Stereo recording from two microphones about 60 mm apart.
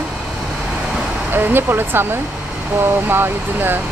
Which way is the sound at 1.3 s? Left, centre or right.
Right.